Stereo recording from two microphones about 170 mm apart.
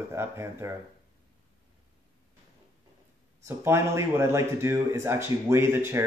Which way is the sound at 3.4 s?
15° right (ahead or behind).